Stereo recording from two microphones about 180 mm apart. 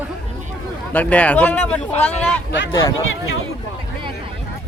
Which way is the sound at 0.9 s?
5° left (ahead or behind).